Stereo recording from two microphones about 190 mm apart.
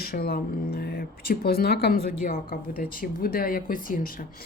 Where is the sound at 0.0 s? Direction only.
50° left (ahead or behind).